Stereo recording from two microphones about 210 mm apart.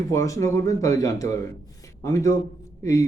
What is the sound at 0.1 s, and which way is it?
A man's voice, 15° left (ahead or behind).